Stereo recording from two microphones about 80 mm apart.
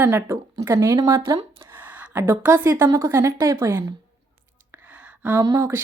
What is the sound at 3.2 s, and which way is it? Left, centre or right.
Speech, right.